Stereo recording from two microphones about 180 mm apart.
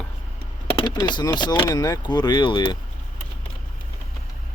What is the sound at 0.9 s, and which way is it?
Speech, 25° left (ahead or behind).